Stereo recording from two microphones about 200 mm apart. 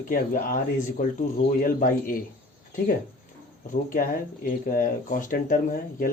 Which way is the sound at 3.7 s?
45° left (ahead or behind).